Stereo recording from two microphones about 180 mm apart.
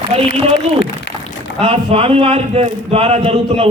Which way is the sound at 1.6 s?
35° right (ahead or behind).